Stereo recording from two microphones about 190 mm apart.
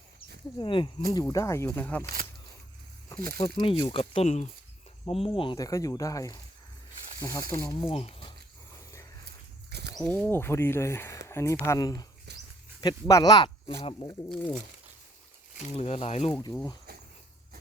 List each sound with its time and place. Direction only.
0.6 s speech: 25° left (ahead or behind)
3.4 s speech: 25° left (ahead or behind)
9.6 s a sound: 60° right (ahead or behind)
9.9 s speech: 10° left (ahead or behind)
12.3 s a sound: 65° right (ahead or behind)
12.8 s speech: 20° left (ahead or behind)
14.3 s speech: 5° left (ahead or behind)
15.7 s speech: 35° left (ahead or behind)